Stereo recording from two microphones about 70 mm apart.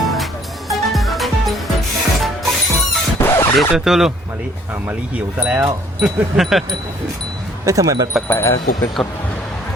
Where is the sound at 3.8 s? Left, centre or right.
Centre.